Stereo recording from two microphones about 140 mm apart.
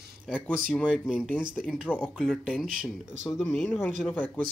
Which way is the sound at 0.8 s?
5° right (ahead or behind).